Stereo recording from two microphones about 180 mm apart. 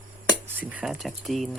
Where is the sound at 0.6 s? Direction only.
5° right (ahead or behind).